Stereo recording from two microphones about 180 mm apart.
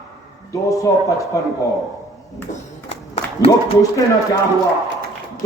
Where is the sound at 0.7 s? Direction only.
20° left (ahead or behind).